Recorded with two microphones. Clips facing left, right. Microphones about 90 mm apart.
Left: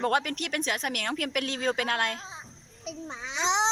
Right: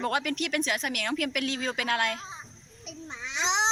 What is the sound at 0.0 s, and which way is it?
Speech, 40° left (ahead or behind).